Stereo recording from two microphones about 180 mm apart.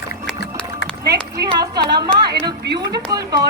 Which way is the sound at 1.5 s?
25° right (ahead or behind).